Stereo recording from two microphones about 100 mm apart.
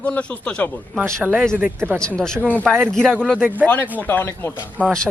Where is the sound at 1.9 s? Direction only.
10° left (ahead or behind).